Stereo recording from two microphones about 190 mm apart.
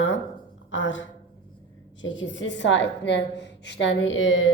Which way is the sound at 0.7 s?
75° left (ahead or behind).